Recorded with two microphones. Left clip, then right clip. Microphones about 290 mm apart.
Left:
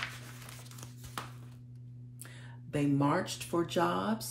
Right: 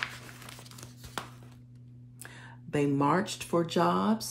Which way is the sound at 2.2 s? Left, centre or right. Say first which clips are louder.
Right 5 dB; right.